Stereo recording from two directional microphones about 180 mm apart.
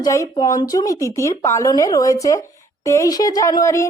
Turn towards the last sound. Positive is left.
turn(degrees=15)  # may be behind; listen again after turning